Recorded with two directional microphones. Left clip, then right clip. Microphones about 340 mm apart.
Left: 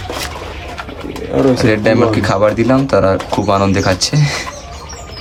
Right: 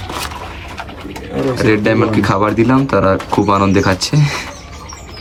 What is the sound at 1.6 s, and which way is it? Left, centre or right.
Speech, centre.